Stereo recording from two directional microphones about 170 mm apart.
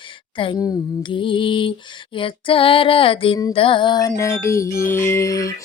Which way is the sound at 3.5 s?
30° left (ahead or behind).